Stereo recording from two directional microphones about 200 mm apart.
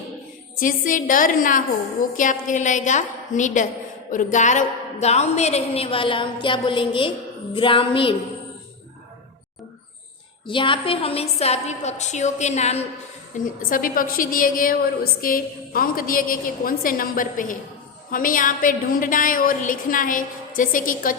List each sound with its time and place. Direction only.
0.6 s a woman's voice: 40° left (ahead or behind); by 7.1 s 25° left (ahead or behind)
7.5 s music: 25° left (ahead or behind)
10.4 s a woman's voice: 25° left (ahead or behind)
13.4 s a woman's voice: 45° left (ahead or behind)